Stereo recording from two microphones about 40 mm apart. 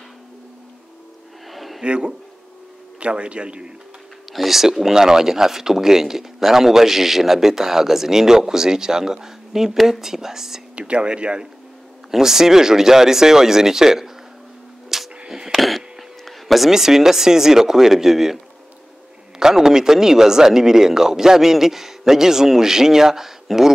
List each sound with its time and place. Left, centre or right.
1.5 s a sound: centre
1.8 s a man's voice: centre
4.3 s speech: centre
10.8 s a man's voice: right
12.1 s speech: centre
14.9 s a sound: centre
15.6 s speech: centre
19.4 s speech: centre